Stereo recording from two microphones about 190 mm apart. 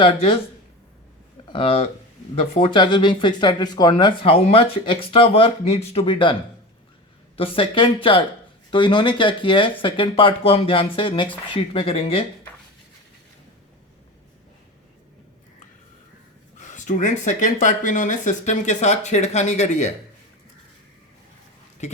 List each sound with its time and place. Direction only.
0.0 s speech: 30° left (ahead or behind)
1.5 s speech: 25° left (ahead or behind)
7.3 s speech: 30° left (ahead or behind)
16.6 s speech: 40° left (ahead or behind)
21.8 s speech: 35° left (ahead or behind)